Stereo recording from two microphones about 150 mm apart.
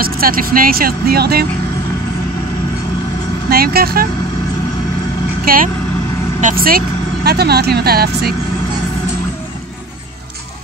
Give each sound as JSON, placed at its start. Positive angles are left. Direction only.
{"t": 0.0, "sound": "speech", "side_deg": -75}
{"t": 3.4, "sound": "speech", "side_deg": -90}
{"t": 5.4, "sound": "speech", "side_deg": -75}
{"t": 7.2, "sound": "speech", "side_deg": -90}